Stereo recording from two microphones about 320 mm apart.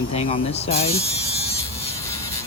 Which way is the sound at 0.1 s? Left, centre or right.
Centre.